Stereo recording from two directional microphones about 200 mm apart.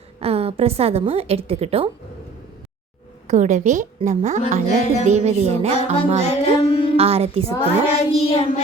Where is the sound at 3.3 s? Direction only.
35° right (ahead or behind).